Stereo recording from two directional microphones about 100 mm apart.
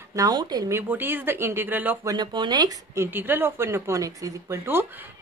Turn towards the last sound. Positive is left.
turn(degrees=-20)  # may be behind; listen again after turning